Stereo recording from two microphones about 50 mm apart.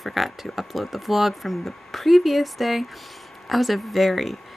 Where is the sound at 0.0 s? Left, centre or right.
Centre.